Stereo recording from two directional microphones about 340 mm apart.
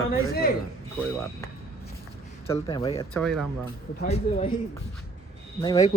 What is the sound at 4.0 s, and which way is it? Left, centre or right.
Speech, left.